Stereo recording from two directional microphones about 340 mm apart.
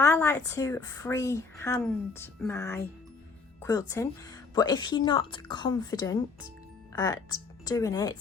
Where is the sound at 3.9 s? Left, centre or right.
Centre.